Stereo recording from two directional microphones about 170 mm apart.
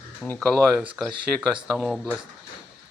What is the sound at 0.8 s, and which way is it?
Speech, 10° right (ahead or behind).